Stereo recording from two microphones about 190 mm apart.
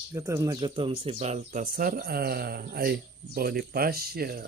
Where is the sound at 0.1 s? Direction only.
15° right (ahead or behind).